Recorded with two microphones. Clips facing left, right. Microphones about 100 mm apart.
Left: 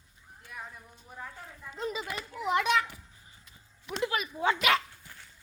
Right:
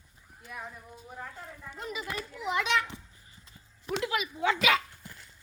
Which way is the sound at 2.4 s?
50° left (ahead or behind).